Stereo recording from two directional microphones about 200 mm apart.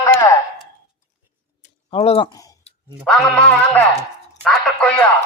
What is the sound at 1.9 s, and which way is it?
Speech, 30° left (ahead or behind).